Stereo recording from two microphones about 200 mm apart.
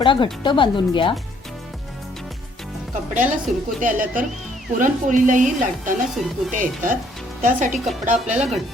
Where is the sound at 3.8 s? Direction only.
40° right (ahead or behind).